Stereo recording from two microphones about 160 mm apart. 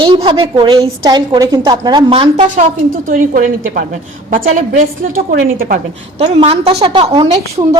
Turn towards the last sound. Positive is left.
turn(degrees=-30)  # may be behind; listen again after turning